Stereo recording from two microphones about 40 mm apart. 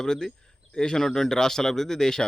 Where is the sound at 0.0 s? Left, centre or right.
Centre.